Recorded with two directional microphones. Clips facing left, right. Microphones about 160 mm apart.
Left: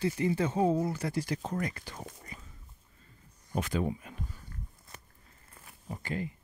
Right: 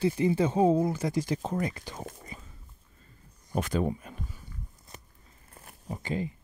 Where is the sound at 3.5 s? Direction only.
45° right (ahead or behind).